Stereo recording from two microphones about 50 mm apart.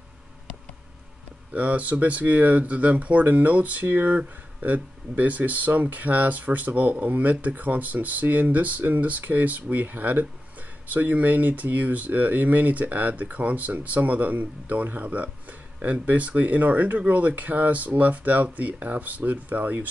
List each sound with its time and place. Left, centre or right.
1.5 s speech: right